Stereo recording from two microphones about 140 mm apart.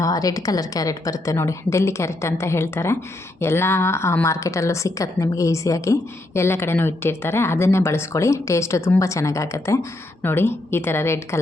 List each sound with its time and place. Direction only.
0.0 s a woman's voice: 25° left (ahead or behind)